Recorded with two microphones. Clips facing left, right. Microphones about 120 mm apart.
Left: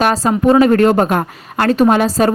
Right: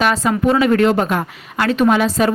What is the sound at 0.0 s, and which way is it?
A woman's voice, 35° left (ahead or behind).